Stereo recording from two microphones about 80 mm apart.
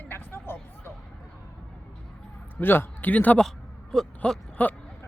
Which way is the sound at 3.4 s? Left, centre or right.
Centre.